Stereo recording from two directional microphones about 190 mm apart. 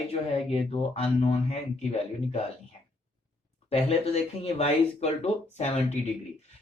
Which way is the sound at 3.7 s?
30° left (ahead or behind).